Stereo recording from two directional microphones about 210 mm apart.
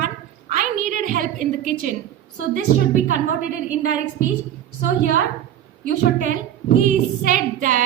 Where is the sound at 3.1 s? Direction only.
35° right (ahead or behind).